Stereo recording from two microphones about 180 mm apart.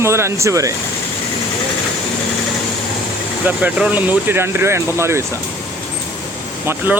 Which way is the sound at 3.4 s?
10° right (ahead or behind).